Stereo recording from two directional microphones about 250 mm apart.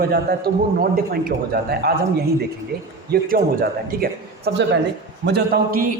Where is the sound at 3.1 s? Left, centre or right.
Right.